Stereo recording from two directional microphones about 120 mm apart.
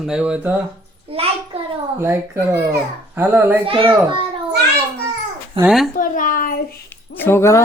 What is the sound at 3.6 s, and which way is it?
Speech, 50° right (ahead or behind).